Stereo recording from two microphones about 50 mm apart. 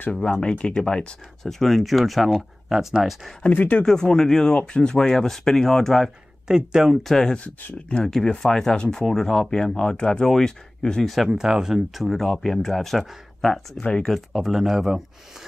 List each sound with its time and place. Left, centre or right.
0.1 s speech: left
1.4 s speech: centre
3.4 s speech: left
3.8 s speech: centre
6.4 s speech: centre
7.0 s speech: centre
7.3 s speech: left
7.9 s speech: centre
11.2 s speech: centre
13.7 s speech: centre
14.0 s speech: centre